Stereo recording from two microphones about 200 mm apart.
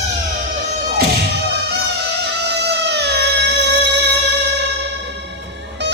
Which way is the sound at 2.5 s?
55° right (ahead or behind).